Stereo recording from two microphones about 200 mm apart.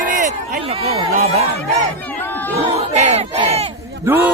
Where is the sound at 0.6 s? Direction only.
30° right (ahead or behind).